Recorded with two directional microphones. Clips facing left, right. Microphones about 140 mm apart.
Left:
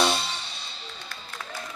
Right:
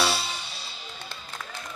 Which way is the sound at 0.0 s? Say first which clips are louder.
Left 2 dB; 5° right (ahead or behind).